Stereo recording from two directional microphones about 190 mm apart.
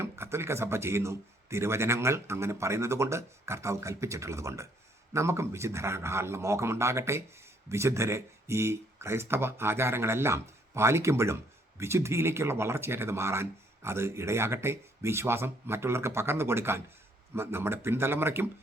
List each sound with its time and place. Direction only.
0.0 s speech: 15° right (ahead or behind)